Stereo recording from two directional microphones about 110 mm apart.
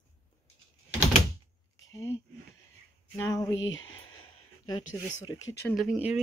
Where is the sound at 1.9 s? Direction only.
30° left (ahead or behind).